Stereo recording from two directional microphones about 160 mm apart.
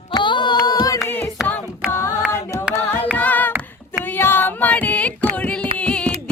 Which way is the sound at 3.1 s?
10° left (ahead or behind).